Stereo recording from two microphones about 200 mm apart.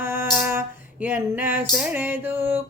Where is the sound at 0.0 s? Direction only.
10° right (ahead or behind).